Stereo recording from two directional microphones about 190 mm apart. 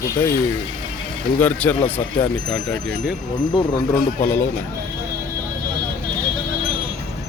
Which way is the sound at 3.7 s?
50° left (ahead or behind).